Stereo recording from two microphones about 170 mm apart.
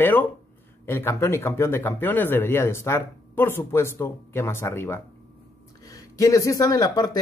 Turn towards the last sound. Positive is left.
turn(degrees=25)  # may be behind; listen again after turning